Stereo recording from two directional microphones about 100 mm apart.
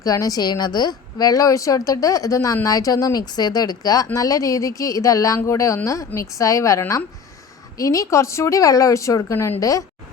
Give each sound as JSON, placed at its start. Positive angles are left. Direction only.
{"t": 0.0, "sound": "speech", "side_deg": 35}